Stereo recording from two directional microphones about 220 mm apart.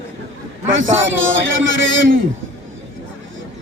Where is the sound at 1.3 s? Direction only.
60° right (ahead or behind).